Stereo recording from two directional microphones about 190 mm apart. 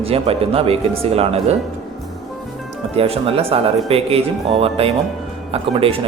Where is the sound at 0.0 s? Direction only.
30° right (ahead or behind).